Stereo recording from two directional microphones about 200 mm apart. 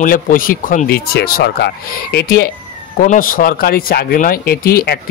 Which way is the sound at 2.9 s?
40° left (ahead or behind).